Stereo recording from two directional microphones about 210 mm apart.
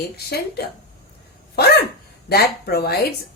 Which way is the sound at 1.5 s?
50° left (ahead or behind).